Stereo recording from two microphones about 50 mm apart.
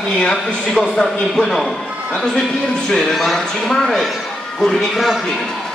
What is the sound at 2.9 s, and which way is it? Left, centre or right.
Speech, centre.